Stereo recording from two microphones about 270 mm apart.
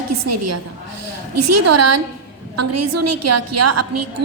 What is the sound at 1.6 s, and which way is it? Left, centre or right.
A woman's voice, right.